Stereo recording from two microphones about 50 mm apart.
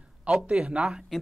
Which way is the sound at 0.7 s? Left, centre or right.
Centre.